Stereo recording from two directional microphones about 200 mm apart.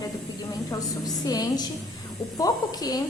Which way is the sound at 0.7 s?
20° left (ahead or behind).